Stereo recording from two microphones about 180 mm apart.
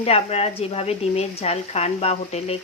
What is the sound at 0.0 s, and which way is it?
Speech, 35° left (ahead or behind).